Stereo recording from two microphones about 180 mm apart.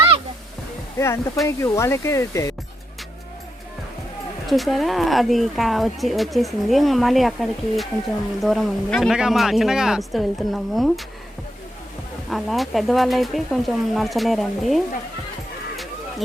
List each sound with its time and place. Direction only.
0.9 s speech: 15° left (ahead or behind)
4.4 s speech: centre (ahead or behind)
12.3 s speech: centre (ahead or behind)